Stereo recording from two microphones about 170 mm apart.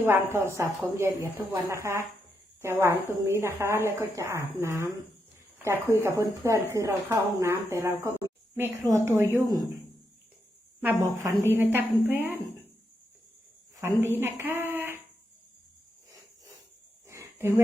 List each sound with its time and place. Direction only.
0.0 s a woman's voice: 15° right (ahead or behind)
10.8 s a woman's voice: 15° right (ahead or behind)
13.7 s a woman's voice: 15° right (ahead or behind)
17.1 s a sound: 15° right (ahead or behind)